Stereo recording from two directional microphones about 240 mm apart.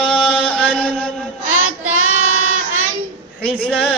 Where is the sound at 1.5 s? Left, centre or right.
Right.